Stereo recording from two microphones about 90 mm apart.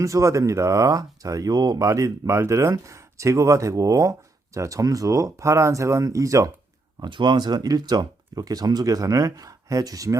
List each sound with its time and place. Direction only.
0.0 s speech: 35° right (ahead or behind)
7.0 s speech: 60° right (ahead or behind); by 10.2 s 40° right (ahead or behind)